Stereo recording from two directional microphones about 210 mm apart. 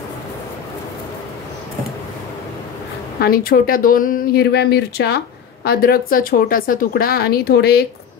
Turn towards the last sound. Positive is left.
turn(degrees=50)  # may be behind; listen again after turning